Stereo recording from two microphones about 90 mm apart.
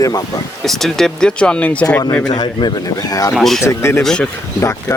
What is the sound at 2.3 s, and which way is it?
Speech, 50° left (ahead or behind).